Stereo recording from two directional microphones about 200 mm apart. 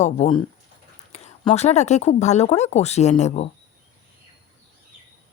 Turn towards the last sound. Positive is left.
turn(degrees=35)  # may be behind; listen again after turning